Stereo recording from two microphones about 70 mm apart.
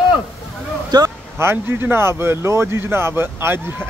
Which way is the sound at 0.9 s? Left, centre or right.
Right.